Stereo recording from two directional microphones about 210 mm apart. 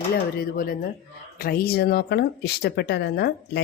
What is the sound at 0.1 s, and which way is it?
Speech, 45° left (ahead or behind).